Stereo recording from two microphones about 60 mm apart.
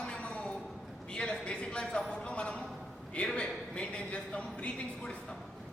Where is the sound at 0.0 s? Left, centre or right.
Centre.